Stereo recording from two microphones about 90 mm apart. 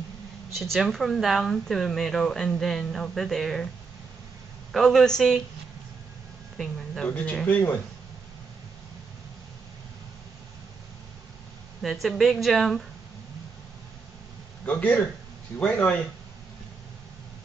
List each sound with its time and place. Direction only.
0.7 s speech: centre (ahead or behind)
4.7 s speech: 5° left (ahead or behind)
7.1 s speech: 15° left (ahead or behind)
11.8 s speech: centre (ahead or behind)
14.7 s speech: 15° left (ahead or behind)